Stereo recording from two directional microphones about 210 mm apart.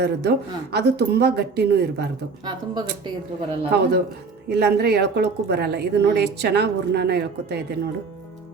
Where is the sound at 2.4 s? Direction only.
20° right (ahead or behind).